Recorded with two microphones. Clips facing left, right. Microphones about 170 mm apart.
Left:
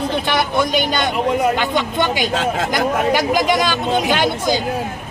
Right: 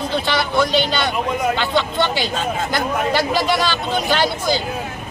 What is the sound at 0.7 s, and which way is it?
Speech, 50° left (ahead or behind).